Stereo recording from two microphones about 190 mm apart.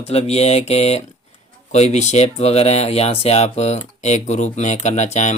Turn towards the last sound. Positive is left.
turn(degrees=35)  # may be behind; listen again after turning